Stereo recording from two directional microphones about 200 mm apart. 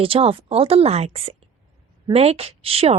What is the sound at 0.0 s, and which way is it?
Speech, 25° right (ahead or behind).